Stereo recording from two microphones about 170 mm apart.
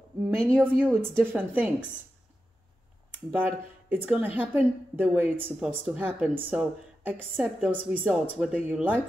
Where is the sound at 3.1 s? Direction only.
10° right (ahead or behind).